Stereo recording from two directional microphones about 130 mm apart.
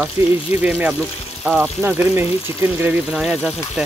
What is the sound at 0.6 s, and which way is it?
Speech, 10° right (ahead or behind).